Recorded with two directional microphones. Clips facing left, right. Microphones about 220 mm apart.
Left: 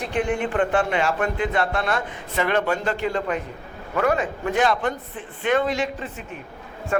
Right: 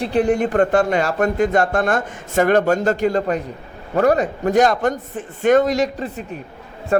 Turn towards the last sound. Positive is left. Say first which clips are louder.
# right 6 dB
turn(degrees=-40)  # may be behind; listen again after turning